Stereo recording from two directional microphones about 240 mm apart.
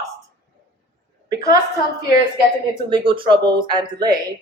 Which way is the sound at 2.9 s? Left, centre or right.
Right.